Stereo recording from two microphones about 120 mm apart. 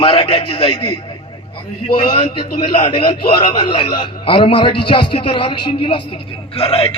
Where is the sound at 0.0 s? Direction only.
45° left (ahead or behind).